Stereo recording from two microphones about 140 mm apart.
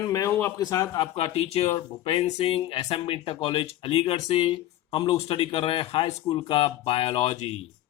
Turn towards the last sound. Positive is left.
turn(degrees=50)  # may be behind; listen again after turning